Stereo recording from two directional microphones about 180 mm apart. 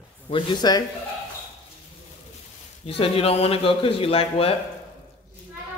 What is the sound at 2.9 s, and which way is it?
A man's voice, 35° left (ahead or behind).